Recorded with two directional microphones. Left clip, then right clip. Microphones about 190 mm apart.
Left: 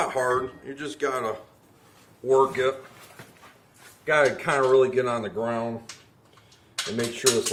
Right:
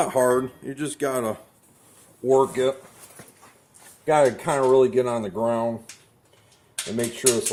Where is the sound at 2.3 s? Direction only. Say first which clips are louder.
Right 1 dB; 30° right (ahead or behind).